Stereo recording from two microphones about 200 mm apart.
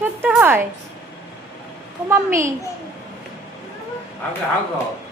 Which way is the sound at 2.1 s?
10° right (ahead or behind).